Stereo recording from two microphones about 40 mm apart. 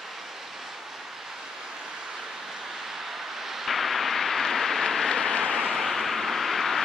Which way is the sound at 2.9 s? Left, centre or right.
Centre.